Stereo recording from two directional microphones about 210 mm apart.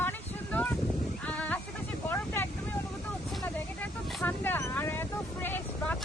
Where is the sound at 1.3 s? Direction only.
5° left (ahead or behind).